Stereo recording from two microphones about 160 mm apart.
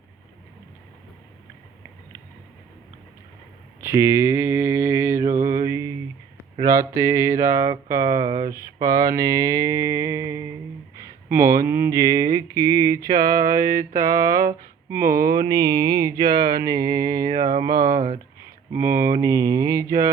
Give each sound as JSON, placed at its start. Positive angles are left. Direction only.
{"t": 3.8, "sound": "mantra", "side_deg": -15}
{"t": 6.6, "sound": "speech", "side_deg": -20}
{"t": 13.9, "sound": "mantra", "side_deg": -65}
{"t": 14.2, "sound": "speech", "side_deg": -20}